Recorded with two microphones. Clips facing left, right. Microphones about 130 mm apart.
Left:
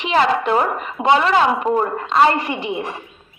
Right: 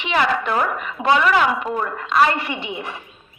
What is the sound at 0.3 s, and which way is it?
A woman's voice, 25° left (ahead or behind).